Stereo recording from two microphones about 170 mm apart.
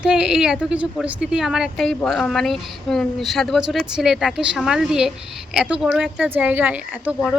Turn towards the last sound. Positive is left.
turn(degrees=-10)  # may be behind; listen again after turning